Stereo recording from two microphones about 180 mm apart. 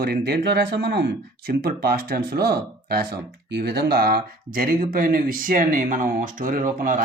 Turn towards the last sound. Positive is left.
turn(degrees=-50)  # may be behind; listen again after turning